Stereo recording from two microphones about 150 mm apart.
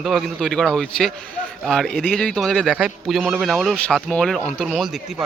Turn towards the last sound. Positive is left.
turn(degrees=0)  # may be behind; listen again after turning